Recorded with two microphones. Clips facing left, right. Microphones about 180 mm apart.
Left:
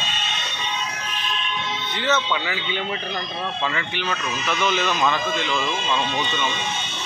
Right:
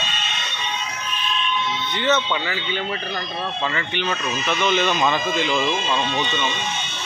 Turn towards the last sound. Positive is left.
turn(degrees=-5)  # may be behind; listen again after turning